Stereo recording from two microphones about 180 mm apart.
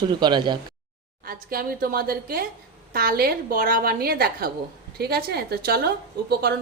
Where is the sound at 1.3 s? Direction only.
55° right (ahead or behind).